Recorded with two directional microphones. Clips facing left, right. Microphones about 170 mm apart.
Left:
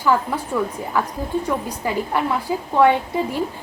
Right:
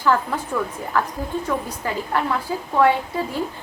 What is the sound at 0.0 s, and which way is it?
A woman's voice, 10° left (ahead or behind).